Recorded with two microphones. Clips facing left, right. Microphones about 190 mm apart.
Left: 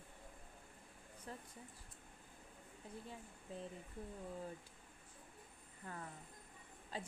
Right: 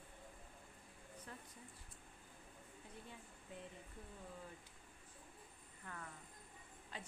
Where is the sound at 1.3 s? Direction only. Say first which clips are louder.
Left 5 dB; 35° left (ahead or behind).